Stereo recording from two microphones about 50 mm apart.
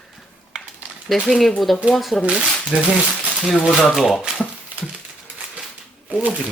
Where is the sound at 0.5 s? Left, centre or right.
Centre.